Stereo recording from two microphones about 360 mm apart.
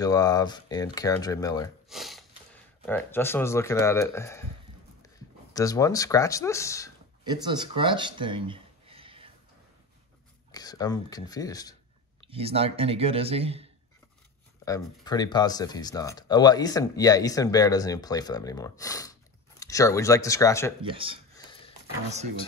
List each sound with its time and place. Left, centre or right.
0.0 s speech: centre
1.9 s speech: centre
7.2 s speech: centre
10.5 s speech: centre
12.2 s speech: centre
14.6 s speech: centre
20.8 s speech: centre
21.5 s a sound: centre